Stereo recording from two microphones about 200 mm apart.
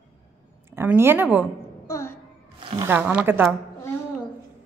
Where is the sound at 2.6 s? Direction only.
25° right (ahead or behind).